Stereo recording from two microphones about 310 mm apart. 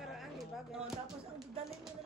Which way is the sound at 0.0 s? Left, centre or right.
Centre.